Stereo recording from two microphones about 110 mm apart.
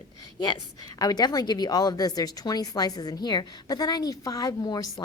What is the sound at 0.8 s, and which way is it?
A woman's voice, 35° left (ahead or behind).